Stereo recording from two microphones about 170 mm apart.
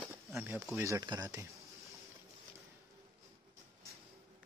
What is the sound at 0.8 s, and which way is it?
Speech, 20° right (ahead or behind).